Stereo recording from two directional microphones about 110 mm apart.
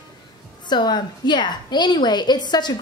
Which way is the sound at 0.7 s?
40° left (ahead or behind).